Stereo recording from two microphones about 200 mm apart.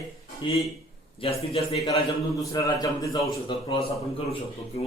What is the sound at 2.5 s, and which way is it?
Speech, 15° left (ahead or behind).